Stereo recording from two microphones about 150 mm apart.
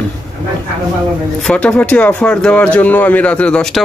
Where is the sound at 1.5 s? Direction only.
10° left (ahead or behind).